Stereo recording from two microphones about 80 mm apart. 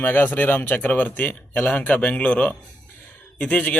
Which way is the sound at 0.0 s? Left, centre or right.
Left.